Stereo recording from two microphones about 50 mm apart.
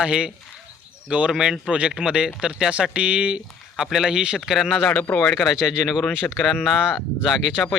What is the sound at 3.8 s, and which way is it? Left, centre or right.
Speech, centre.